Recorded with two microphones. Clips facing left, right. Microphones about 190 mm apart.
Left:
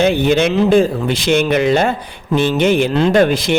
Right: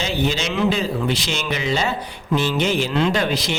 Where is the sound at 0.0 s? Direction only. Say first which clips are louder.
Left 10 dB; 60° left (ahead or behind).